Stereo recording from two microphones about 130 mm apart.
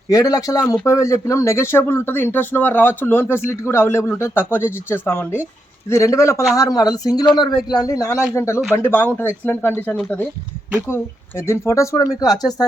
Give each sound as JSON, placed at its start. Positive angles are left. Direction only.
{"t": 0.1, "sound": "speech", "side_deg": 30}
{"t": 10.8, "sound": "speech", "side_deg": 20}